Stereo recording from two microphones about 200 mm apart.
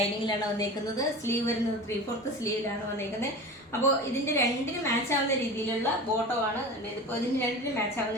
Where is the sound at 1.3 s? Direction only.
15° left (ahead or behind).